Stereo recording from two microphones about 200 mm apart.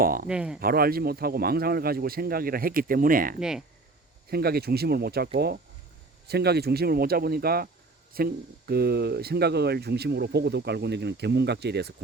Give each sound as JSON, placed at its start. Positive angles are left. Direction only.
{"t": 0.0, "sound": "speech", "side_deg": -45}
{"t": 0.3, "sound": "speech", "side_deg": -5}
{"t": 0.6, "sound": "speech", "side_deg": -50}